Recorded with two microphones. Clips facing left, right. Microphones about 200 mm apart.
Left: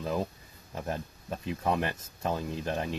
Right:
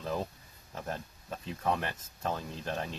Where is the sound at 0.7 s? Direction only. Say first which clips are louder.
Left 4 dB; 15° left (ahead or behind).